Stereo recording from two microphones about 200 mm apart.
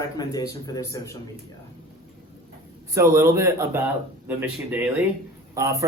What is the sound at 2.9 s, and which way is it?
A man's voice, 15° right (ahead or behind).